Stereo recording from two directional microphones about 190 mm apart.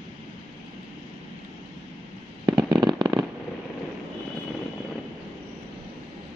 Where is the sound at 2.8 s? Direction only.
25° right (ahead or behind).